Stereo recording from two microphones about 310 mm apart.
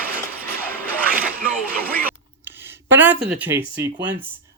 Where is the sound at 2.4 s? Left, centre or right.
Centre.